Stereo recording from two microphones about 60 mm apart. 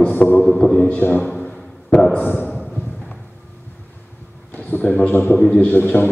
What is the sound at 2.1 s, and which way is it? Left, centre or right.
Speech, left.